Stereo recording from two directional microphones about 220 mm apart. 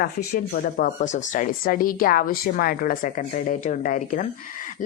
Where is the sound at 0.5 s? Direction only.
35° left (ahead or behind).